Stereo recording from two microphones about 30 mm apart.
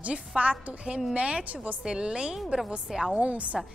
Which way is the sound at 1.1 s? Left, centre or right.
Right.